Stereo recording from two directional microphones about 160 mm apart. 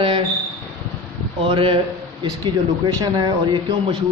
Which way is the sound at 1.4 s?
35° right (ahead or behind).